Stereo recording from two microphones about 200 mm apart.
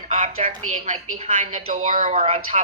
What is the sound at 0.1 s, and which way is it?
A woman's voice, 30° right (ahead or behind).